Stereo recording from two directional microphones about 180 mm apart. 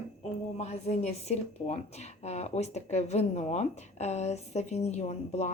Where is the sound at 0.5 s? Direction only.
40° left (ahead or behind).